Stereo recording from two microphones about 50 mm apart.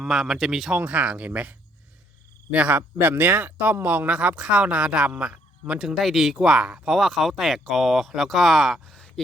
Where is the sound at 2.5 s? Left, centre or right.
Right.